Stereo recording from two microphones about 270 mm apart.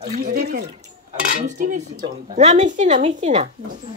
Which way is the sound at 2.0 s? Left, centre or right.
Right.